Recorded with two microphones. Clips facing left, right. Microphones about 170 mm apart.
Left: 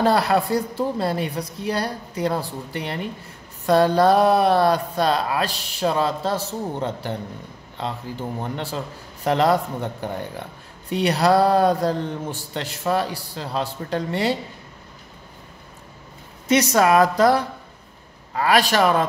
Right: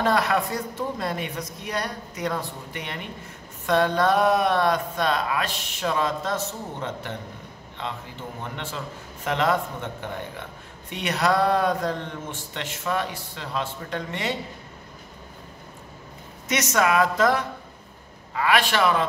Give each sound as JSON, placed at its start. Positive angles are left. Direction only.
{"t": 0.0, "sound": "speech", "side_deg": 35}
{"t": 16.4, "sound": "speech", "side_deg": 35}